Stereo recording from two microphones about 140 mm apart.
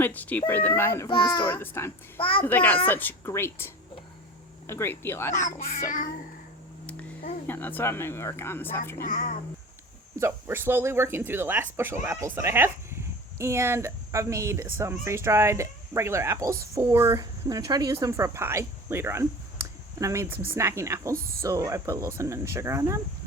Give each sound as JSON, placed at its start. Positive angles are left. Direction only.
{"t": 0.0, "sound": "a child's voice", "side_deg": 10}
{"t": 1.0, "sound": "a child's voice", "side_deg": 35}
{"t": 1.5, "sound": "a child's voice", "side_deg": 20}
{"t": 2.1, "sound": "a child's voice", "side_deg": 40}
{"t": 2.4, "sound": "speech", "side_deg": 10}
{"t": 5.3, "sound": "speech", "side_deg": 65}
{"t": 7.4, "sound": "speech", "side_deg": 15}
{"t": 9.0, "sound": "speech", "side_deg": 85}
{"t": 10.2, "sound": "speech", "side_deg": -20}